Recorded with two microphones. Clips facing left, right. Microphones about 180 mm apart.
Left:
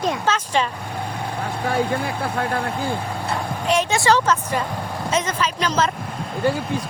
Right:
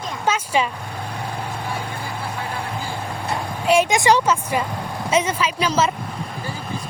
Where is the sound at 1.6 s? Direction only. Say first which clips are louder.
Left 7 dB; 65° left (ahead or behind).